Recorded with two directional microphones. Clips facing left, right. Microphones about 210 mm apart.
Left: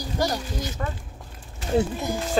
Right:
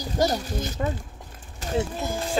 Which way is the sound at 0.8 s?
20° right (ahead or behind).